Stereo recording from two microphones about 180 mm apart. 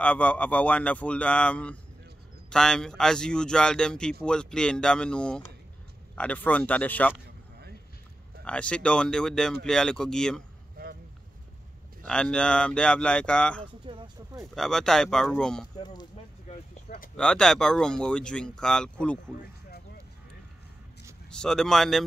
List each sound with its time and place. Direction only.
0.0 s speech: 5° left (ahead or behind)
8.5 s speech: 5° left (ahead or behind)
10.8 s a sound: 55° right (ahead or behind)
12.1 s speech: 5° left (ahead or behind)
13.8 s speech: 25° right (ahead or behind)
14.3 s speech: centre (ahead or behind)
15.7 s speech: 20° left (ahead or behind)
16.9 s a sound: 55° left (ahead or behind)
17.2 s speech: 5° left (ahead or behind)
21.3 s speech: 5° left (ahead or behind)